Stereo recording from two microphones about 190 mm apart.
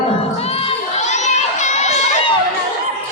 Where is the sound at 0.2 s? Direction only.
30° left (ahead or behind).